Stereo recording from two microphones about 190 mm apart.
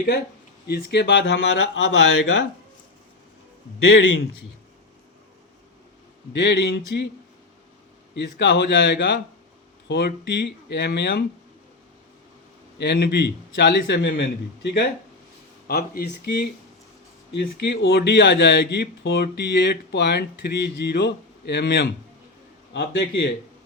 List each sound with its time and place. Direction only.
0.7 s speech: 60° left (ahead or behind)
6.3 s speech: 70° left (ahead or behind)
8.1 s speech: 70° left (ahead or behind)
12.8 s speech: 60° left (ahead or behind)